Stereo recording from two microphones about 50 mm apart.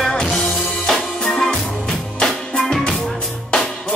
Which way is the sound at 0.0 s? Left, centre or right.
Centre.